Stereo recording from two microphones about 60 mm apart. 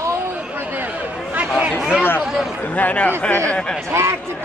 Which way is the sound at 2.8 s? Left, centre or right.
Left.